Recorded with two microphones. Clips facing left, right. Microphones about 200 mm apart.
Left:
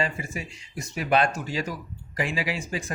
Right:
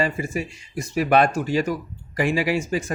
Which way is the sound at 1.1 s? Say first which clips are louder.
Right 4 dB; 60° right (ahead or behind).